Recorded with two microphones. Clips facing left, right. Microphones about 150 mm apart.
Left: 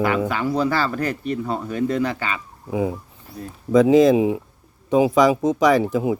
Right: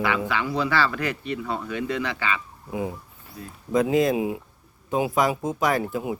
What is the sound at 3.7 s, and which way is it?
Speech, 90° left.